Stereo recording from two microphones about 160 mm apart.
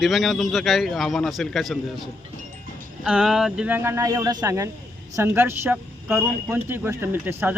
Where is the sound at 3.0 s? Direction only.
5° right (ahead or behind).